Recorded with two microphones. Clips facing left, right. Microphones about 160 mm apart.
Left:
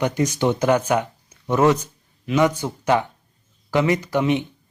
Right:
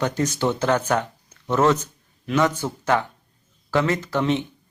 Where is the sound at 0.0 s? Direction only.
15° left (ahead or behind).